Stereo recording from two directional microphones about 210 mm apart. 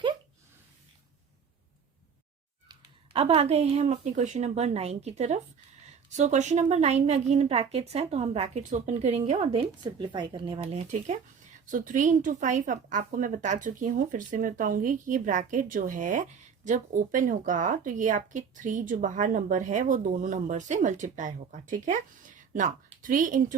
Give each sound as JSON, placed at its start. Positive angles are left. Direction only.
{"t": 2.6, "sound": "a woman's voice", "side_deg": -25}